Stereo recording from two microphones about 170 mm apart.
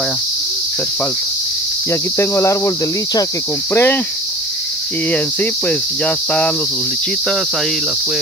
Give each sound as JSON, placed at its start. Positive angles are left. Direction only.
{"t": 1.9, "sound": "cricket", "side_deg": 15}
{"t": 3.7, "sound": "cricket", "side_deg": 15}
{"t": 5.1, "sound": "cricket", "side_deg": 10}